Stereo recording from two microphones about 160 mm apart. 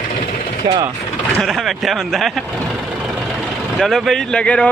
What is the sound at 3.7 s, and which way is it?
Speech, centre (ahead or behind).